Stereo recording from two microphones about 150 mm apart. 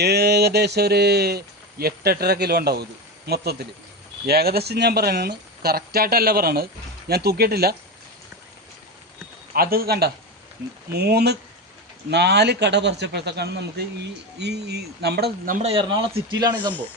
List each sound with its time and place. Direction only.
0.0 s speech: 90° right
9.6 s speech: 90° right
15.6 s speech: 35° right (ahead or behind)